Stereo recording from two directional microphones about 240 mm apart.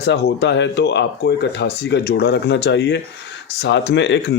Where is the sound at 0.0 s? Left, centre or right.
Left.